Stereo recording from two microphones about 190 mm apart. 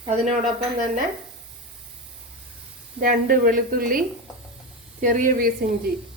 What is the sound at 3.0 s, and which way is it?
A woman's voice, 50° right (ahead or behind).